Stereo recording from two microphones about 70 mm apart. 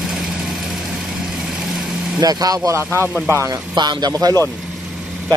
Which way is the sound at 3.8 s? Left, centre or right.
Right.